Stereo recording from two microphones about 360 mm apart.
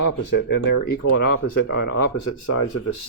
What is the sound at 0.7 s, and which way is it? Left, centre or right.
Speech, left.